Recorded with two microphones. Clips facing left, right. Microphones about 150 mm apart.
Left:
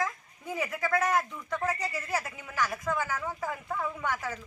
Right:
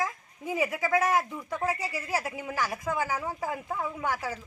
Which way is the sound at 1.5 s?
10° right (ahead or behind).